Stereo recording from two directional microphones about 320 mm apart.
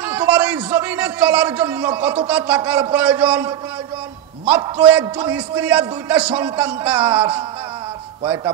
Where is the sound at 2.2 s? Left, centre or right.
Centre.